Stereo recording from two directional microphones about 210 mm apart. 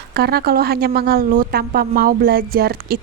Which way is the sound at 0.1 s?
50° right (ahead or behind).